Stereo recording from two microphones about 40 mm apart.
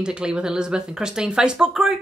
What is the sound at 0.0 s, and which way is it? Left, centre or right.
Speech, right.